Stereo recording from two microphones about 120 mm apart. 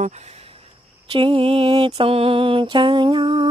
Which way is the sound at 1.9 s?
55° right (ahead or behind).